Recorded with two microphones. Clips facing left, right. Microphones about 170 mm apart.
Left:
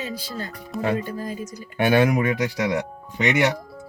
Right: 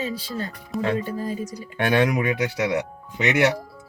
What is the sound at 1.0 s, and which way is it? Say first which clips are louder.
Speech: right 2 dB; 30° right (ahead or behind).